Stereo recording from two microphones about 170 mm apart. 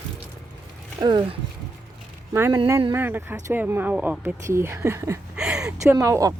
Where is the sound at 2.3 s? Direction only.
15° right (ahead or behind).